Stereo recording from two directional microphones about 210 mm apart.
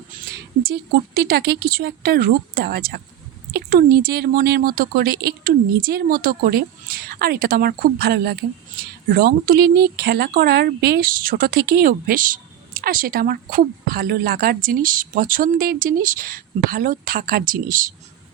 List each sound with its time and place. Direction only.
0.6 s speech: 45° right (ahead or behind)